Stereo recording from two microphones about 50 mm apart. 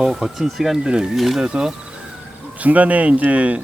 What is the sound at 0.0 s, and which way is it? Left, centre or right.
Speech, centre.